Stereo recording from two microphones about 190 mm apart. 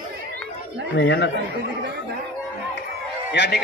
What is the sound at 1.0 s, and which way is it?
Speech, 65° left (ahead or behind).